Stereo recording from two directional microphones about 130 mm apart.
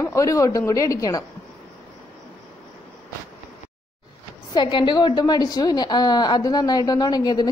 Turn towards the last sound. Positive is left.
turn(degrees=30)  # may be behind; listen again after turning